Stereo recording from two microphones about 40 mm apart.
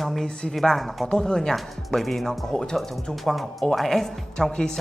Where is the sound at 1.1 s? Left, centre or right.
Centre.